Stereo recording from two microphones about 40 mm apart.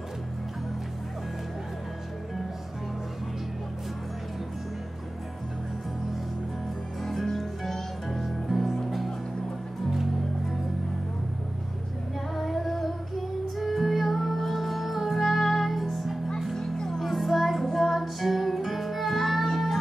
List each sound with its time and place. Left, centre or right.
7.0 s music: centre
12.4 s female singing: centre
13.6 s music: centre
16.5 s music: centre
17.0 s music: centre